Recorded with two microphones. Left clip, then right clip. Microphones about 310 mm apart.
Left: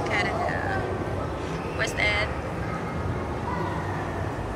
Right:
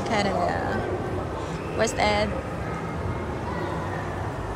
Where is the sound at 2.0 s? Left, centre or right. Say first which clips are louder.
Right 1 dB; centre.